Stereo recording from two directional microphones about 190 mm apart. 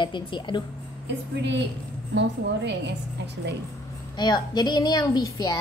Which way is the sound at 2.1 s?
65° right (ahead or behind).